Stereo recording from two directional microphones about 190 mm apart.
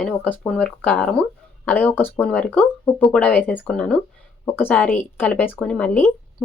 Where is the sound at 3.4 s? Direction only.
5° right (ahead or behind).